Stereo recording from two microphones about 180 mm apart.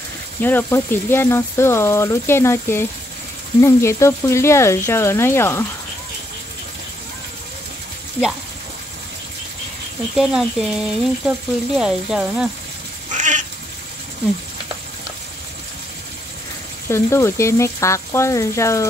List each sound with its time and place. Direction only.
0.4 s speech: 10° left (ahead or behind)
10.1 s speech: centre (ahead or behind)
13.1 s cat: 45° right (ahead or behind)
16.9 s speech: 15° left (ahead or behind)